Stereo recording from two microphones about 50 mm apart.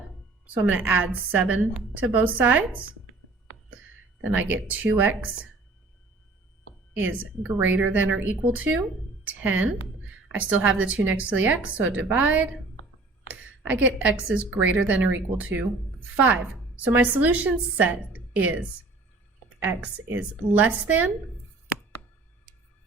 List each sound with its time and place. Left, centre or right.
0.4 s a woman's voice: right
4.2 s a woman's voice: right
7.0 s a woman's voice: right
19.8 s a woman's voice: right